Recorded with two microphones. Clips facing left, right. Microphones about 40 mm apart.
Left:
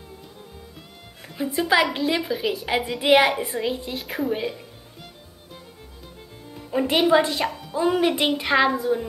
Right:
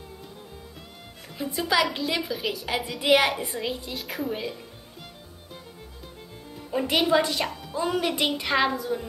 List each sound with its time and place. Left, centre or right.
1.3 s a woman's voice: centre
6.5 s speech: centre
7.7 s a woman's voice: centre